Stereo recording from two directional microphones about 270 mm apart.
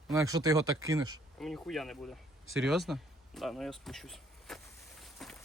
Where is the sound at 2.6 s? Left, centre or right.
Centre.